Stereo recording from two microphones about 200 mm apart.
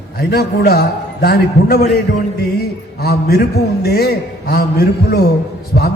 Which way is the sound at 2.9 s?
50° left (ahead or behind).